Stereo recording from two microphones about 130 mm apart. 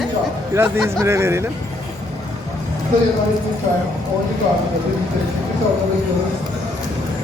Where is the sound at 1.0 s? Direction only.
20° right (ahead or behind).